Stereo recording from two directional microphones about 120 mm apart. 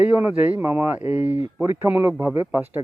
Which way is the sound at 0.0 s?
15° right (ahead or behind).